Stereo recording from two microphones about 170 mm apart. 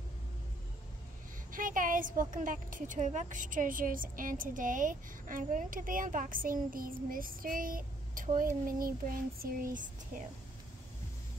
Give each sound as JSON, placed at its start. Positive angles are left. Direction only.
{"t": 1.5, "sound": "a woman's voice", "side_deg": -50}